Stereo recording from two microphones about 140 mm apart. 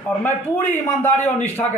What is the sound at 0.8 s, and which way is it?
Speech, 15° left (ahead or behind).